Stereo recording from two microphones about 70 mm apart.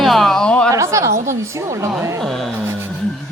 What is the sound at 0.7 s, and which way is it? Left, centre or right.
A woman's voice, right.